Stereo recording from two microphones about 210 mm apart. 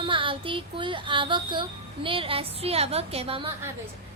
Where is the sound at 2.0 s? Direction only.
25° right (ahead or behind).